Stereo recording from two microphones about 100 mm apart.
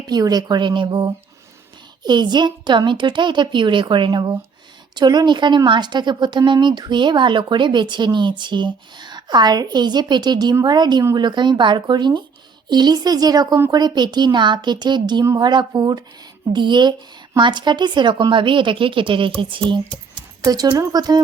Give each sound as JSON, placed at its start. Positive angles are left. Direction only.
{"t": 0.1, "sound": "a woman's voice", "side_deg": -40}
{"t": 20.4, "sound": "speech", "side_deg": -40}